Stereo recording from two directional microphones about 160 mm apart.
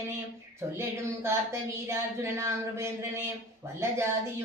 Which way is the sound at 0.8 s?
15° right (ahead or behind).